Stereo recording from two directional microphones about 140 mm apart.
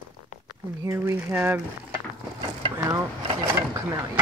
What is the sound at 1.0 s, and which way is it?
Speech, 15° right (ahead or behind).